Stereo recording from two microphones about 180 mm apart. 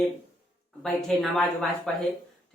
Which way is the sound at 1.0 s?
Centre (ahead or behind).